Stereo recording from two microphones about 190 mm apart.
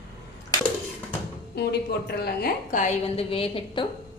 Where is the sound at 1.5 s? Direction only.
60° left (ahead or behind); by 3.9 s 25° left (ahead or behind).